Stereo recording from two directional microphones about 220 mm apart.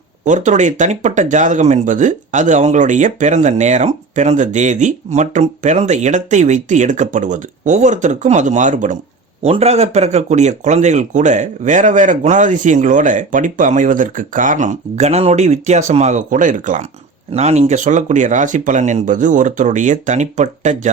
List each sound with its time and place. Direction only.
0.3 s speech: 35° right (ahead or behind)